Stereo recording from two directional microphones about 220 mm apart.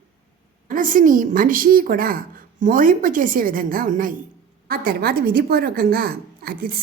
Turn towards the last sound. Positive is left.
turn(degrees=-40)  # may be behind; listen again after turning